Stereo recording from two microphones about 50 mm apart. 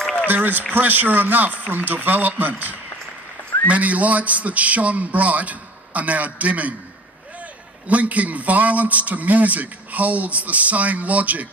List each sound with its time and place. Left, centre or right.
0.3 s a man's voice: right
7.9 s a man's voice: right